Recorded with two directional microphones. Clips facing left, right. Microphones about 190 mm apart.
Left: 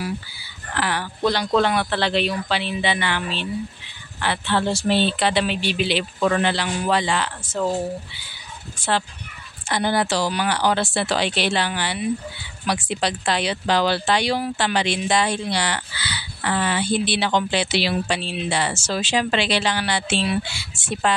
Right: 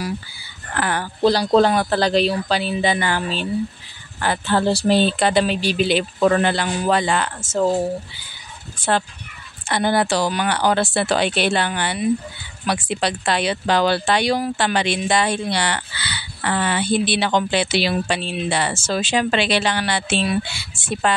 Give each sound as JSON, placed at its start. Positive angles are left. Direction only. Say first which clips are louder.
{"t": 0.7, "sound": "speech", "louder": "right 2 dB", "side_deg": -50}
{"t": 1.2, "sound": "speech", "louder": "right 5 dB", "side_deg": -35}
{"t": 9.7, "sound": "speech", "louder": "right 3 dB", "side_deg": -55}